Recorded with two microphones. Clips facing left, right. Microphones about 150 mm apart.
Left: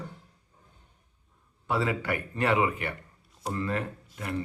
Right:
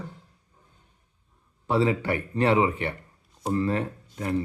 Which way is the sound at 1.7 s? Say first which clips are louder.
Right 5 dB; 30° right (ahead or behind).